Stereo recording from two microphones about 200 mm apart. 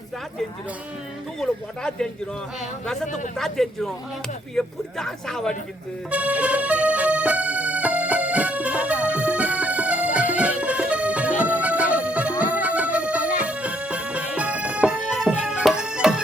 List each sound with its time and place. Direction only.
1.4 s a man's voice: 5° left (ahead or behind)
3.3 s a man's voice: centre (ahead or behind)
6.1 s music: 5° right (ahead or behind)